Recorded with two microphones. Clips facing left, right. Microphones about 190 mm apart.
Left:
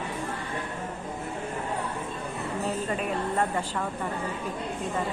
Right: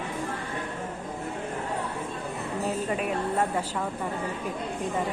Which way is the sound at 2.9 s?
5° right (ahead or behind).